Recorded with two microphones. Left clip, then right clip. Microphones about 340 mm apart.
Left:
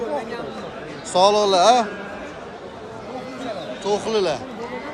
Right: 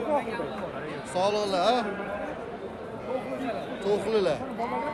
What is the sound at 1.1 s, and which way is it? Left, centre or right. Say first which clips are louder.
Speech: left 11 dB; centre.